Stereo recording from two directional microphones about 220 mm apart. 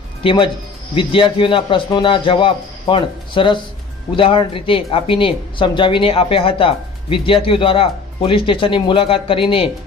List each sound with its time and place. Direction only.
0.2 s speech: 25° left (ahead or behind)